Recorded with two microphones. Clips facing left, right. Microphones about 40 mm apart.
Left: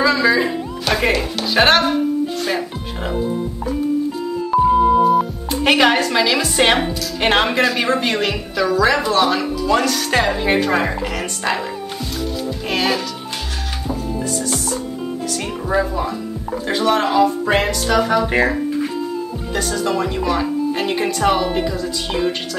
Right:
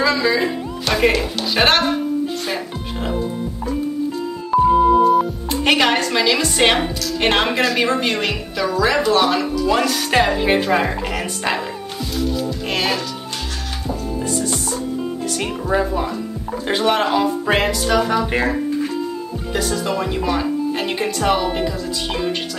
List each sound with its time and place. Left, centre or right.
0.0 s speech: centre
4.5 s speech: centre
12.7 s speech: centre
15.7 s speech: centre